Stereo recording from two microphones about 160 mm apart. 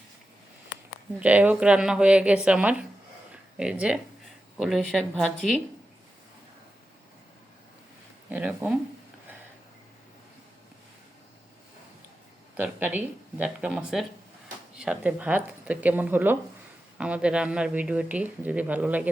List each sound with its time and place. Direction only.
1.2 s speech: 10° right (ahead or behind)
8.3 s speech: 10° right (ahead or behind)
12.5 s speech: 10° right (ahead or behind)